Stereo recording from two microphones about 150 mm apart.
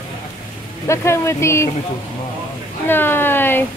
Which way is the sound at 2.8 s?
15° left (ahead or behind).